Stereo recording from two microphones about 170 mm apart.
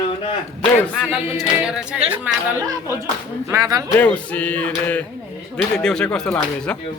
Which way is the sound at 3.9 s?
10° left (ahead or behind).